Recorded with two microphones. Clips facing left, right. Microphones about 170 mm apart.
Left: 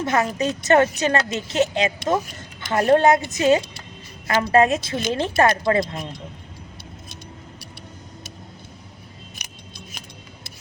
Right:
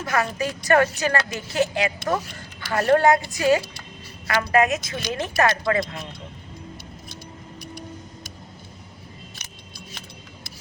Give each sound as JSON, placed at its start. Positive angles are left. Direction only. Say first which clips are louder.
{"t": 0.0, "sound": "speech", "louder": "left 3 dB", "side_deg": 25}
{"t": 9.3, "sound": "keys jangling", "louder": "left 2 dB", "side_deg": 15}